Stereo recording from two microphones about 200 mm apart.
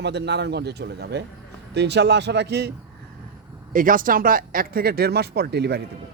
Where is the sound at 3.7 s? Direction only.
45° right (ahead or behind).